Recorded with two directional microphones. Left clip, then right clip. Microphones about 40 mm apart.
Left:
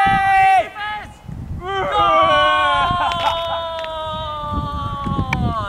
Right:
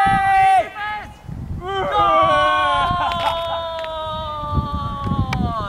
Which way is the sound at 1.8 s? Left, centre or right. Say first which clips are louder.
Left 1 dB; centre.